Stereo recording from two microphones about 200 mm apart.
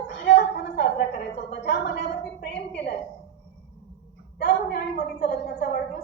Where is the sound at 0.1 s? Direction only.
60° left (ahead or behind).